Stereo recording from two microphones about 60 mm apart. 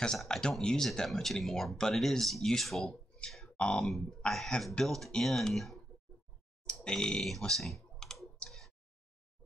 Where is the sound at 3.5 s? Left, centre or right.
Centre.